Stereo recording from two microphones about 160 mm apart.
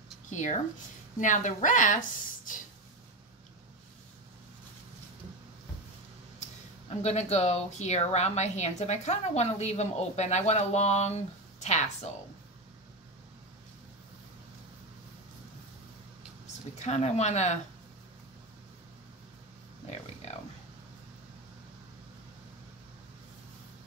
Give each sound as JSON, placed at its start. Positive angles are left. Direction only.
{"t": 0.3, "sound": "speech", "side_deg": 50}
{"t": 7.0, "sound": "speech", "side_deg": 45}
{"t": 16.8, "sound": "speech", "side_deg": 45}
{"t": 20.2, "sound": "a sound", "side_deg": 45}